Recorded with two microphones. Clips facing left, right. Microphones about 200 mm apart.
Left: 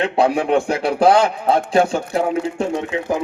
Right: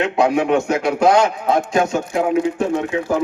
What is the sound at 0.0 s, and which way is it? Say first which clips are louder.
A man's voice: right 1 dB; 35° left (ahead or behind).